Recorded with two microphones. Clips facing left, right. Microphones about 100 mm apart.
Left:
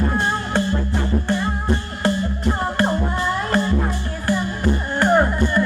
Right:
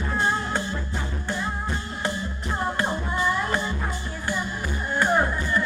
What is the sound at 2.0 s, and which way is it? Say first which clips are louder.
Music: left 8 dB; 75° left (ahead or behind).